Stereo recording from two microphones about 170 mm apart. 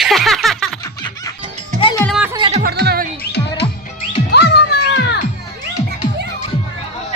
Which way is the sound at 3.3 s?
80° left.